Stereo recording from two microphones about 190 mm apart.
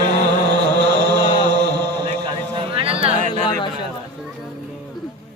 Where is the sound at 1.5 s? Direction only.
60° right (ahead or behind).